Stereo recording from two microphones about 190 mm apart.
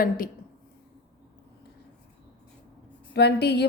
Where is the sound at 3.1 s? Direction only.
60° left (ahead or behind).